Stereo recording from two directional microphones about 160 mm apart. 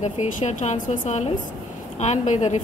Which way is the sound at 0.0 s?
50° left (ahead or behind).